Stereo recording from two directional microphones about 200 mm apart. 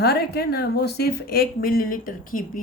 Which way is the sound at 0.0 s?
50° left (ahead or behind).